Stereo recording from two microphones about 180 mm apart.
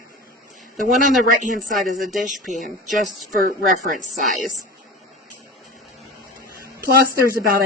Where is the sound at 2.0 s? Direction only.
Centre (ahead or behind).